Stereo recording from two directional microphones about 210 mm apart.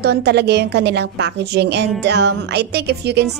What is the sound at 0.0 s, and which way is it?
A woman's voice, 50° right (ahead or behind).